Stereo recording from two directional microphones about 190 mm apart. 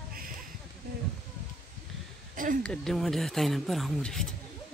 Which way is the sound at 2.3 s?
45° right (ahead or behind).